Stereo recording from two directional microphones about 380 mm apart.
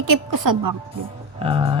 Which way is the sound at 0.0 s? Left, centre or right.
Right.